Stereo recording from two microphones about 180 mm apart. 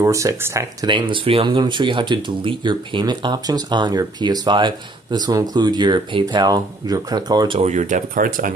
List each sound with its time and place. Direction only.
0.0 s speech: 15° right (ahead or behind)
0.9 s speech: 25° right (ahead or behind)
7.6 s speech: 45° right (ahead or behind)